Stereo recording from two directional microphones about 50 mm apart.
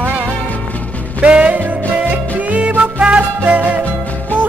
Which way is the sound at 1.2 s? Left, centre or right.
Right.